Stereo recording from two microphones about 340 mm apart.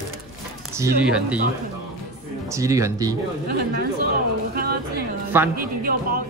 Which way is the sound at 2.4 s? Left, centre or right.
Centre.